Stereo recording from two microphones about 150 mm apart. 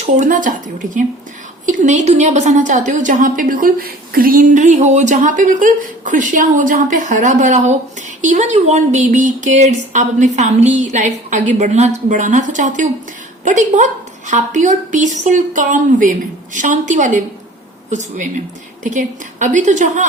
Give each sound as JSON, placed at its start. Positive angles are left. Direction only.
{"t": 0.0, "sound": "a woman's voice", "side_deg": -60}
{"t": 1.6, "sound": "a woman's voice", "side_deg": -55}
{"t": 18.8, "sound": "a woman's voice", "side_deg": -55}